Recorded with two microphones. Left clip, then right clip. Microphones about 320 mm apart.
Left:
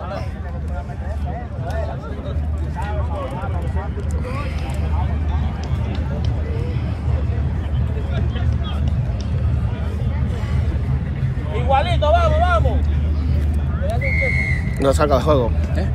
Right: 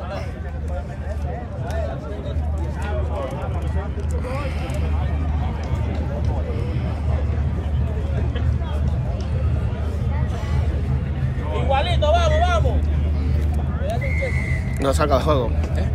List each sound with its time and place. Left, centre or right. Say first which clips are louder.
11.7 s vehicle: left 3 dB; centre
14.8 s speech: left 3 dB; centre